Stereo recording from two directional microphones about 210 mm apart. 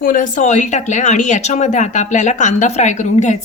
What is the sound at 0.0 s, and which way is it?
Speech, 40° left (ahead or behind).